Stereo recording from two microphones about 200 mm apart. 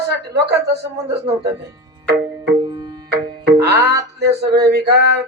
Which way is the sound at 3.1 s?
55° right (ahead or behind).